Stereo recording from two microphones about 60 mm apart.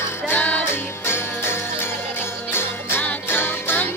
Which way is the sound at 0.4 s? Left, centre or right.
Left.